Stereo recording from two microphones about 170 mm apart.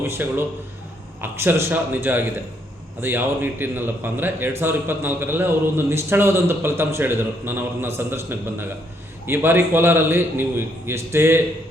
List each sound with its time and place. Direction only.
0.0 s a man's voice: 15° right (ahead or behind)